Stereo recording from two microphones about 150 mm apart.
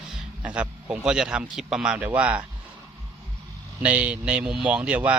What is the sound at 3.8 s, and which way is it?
A man's voice, 10° right (ahead or behind).